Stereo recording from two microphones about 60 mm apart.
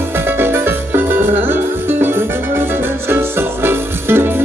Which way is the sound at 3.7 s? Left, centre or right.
Right.